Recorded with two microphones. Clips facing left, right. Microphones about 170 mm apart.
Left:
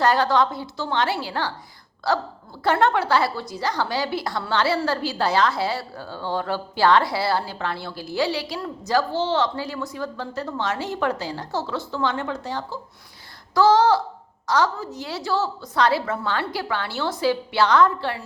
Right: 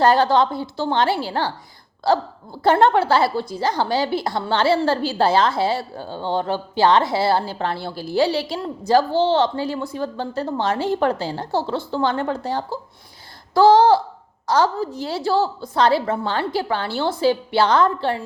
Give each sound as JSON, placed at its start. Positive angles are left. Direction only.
{"t": 0.0, "sound": "a woman's voice", "side_deg": -25}